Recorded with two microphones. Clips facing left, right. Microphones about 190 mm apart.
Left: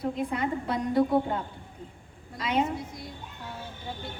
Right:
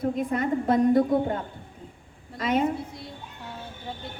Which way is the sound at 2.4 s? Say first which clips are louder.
Right 2 dB; 50° right (ahead or behind).